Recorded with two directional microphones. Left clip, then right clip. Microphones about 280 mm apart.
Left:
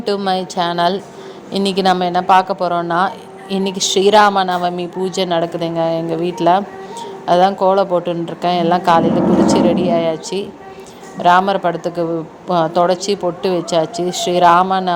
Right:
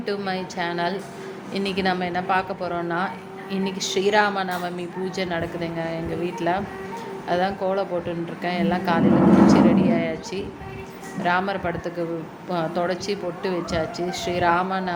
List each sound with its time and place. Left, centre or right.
0.3 s a woman's voice: left